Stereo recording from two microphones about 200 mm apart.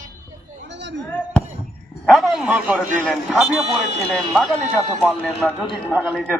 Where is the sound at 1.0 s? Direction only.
5° left (ahead or behind).